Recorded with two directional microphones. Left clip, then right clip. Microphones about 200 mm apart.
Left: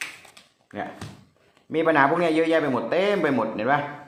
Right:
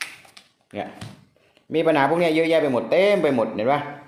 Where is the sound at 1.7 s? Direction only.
35° right (ahead or behind).